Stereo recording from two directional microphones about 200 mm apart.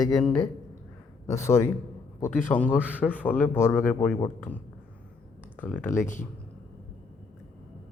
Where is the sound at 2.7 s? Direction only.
5° right (ahead or behind).